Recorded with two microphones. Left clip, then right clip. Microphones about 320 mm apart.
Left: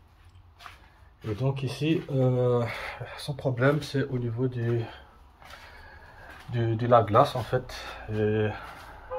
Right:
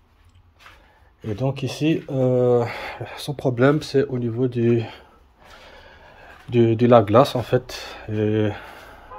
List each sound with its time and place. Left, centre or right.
1.3 s speech: centre
6.5 s speech: right